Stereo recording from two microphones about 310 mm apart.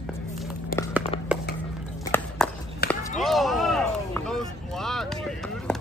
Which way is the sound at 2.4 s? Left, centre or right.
Centre.